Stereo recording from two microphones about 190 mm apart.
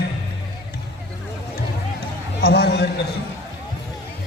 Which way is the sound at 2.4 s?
60° left (ahead or behind).